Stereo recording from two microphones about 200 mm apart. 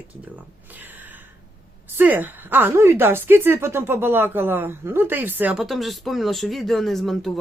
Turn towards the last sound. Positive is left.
turn(degrees=0)  # may be behind; listen again after turning